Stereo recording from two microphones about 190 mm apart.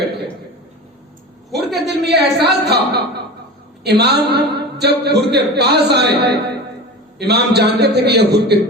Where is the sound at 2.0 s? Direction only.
60° right (ahead or behind).